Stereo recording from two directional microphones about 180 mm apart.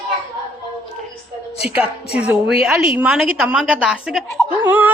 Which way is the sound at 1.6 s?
10° right (ahead or behind).